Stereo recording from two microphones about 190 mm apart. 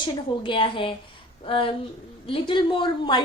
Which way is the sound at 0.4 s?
25° left (ahead or behind).